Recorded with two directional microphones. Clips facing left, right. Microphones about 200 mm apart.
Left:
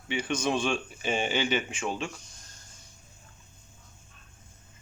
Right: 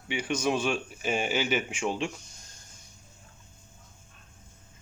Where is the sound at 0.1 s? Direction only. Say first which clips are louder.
Even; 10° right (ahead or behind).